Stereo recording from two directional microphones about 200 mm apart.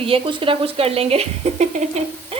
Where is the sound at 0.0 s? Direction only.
25° right (ahead or behind).